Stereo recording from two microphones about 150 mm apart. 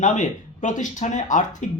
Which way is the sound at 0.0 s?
55° left (ahead or behind).